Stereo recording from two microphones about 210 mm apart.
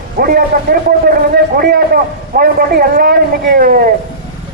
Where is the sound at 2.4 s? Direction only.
45° right (ahead or behind).